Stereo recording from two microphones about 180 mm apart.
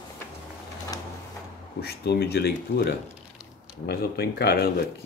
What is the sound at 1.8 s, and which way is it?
Speech, 60° left (ahead or behind).